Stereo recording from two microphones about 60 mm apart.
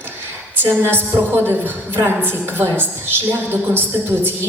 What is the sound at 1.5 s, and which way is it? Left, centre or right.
A woman's voice, right.